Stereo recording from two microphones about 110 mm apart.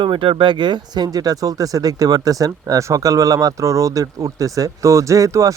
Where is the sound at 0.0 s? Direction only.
50° right (ahead or behind).